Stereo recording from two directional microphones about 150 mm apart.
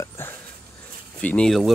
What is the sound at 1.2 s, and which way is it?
Speech, 5° left (ahead or behind).